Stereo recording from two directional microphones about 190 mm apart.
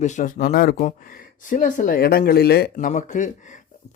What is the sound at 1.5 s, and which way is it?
Speech, 45° left (ahead or behind).